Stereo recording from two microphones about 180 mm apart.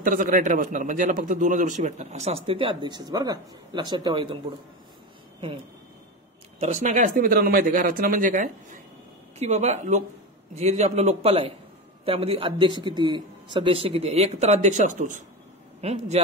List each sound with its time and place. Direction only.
0.0 s a man's voice: 50° right (ahead or behind); by 4.4 s 25° right (ahead or behind)
6.6 s a man's voice: 40° right (ahead or behind)